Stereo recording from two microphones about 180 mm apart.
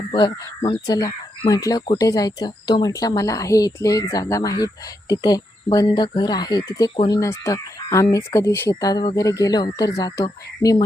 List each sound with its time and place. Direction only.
0.1 s speech: 25° left (ahead or behind)